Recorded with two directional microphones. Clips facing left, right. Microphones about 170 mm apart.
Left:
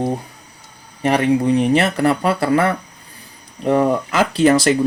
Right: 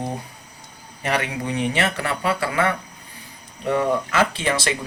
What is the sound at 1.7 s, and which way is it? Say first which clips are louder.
Speech: left 8 dB; 40° left (ahead or behind).